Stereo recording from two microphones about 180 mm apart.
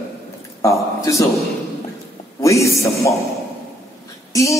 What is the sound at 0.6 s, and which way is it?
Speech, 15° left (ahead or behind).